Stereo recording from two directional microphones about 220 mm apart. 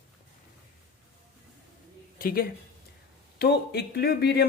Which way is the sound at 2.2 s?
40° left (ahead or behind).